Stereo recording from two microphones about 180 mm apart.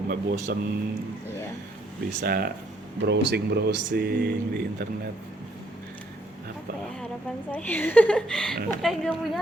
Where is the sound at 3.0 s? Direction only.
70° right (ahead or behind).